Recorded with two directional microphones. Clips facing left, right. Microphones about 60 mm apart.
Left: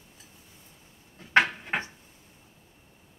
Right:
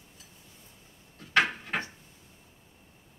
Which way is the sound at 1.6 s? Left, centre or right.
Left.